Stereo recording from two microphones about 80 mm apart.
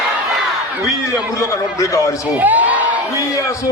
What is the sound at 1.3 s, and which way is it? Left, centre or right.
Speech, left.